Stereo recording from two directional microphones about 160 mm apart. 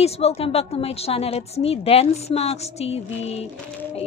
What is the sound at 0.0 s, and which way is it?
A woman's voice, 40° left (ahead or behind).